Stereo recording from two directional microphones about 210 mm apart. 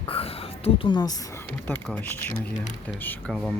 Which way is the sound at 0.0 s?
25° left (ahead or behind).